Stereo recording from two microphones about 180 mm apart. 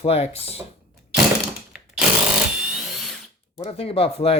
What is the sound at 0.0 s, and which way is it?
Speech, 35° left (ahead or behind).